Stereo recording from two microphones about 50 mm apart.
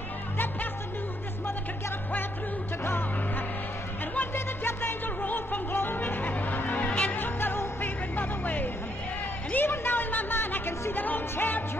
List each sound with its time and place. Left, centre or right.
2.8 s music: left
5.2 s music: left
6.9 s music: left
7.2 s music: left
9.5 s a sound: left
10.9 s music: left